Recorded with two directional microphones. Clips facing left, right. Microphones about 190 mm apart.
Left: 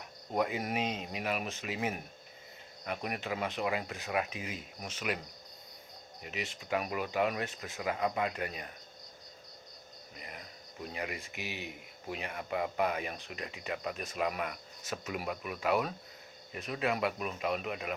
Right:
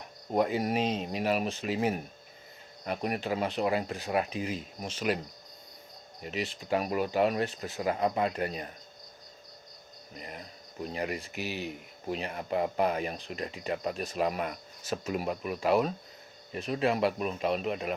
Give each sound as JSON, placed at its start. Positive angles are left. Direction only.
{"t": 0.3, "sound": "speech", "side_deg": -35}
{"t": 6.2, "sound": "speech", "side_deg": -35}
{"t": 10.2, "sound": "speech", "side_deg": -35}